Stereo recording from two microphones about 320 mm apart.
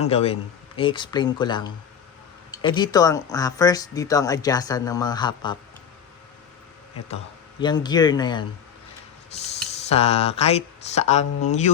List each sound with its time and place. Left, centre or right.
0.0 s speech: centre
7.6 s speech: centre